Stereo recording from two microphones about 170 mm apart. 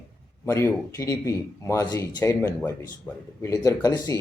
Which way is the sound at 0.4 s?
15° left (ahead or behind).